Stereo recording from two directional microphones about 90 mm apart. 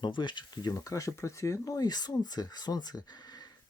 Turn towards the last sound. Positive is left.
turn(degrees=50)  # may be behind; listen again after turning